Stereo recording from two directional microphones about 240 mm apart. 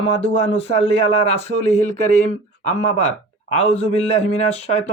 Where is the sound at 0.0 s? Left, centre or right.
Left.